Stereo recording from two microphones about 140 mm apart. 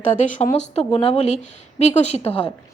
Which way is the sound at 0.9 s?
45° left (ahead or behind).